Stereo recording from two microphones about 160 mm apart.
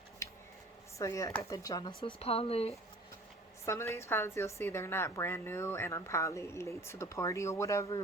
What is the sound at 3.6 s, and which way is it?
A woman's voice, 15° left (ahead or behind).